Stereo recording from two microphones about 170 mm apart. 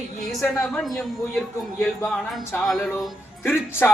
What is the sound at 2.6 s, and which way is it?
Speech, centre (ahead or behind).